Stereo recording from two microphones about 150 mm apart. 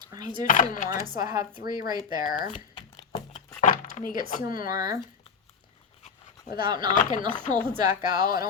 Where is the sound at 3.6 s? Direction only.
60° left (ahead or behind).